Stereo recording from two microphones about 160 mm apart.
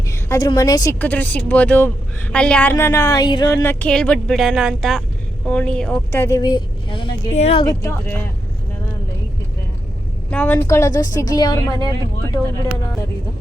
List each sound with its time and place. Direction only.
0.1 s a woman's voice: 20° left (ahead or behind)
0.9 s a woman's voice: 10° left (ahead or behind); by 7.6 s 40° left (ahead or behind)
7.6 s a woman's voice: 20° left (ahead or behind)
10.3 s a woman's voice: 10° left (ahead or behind)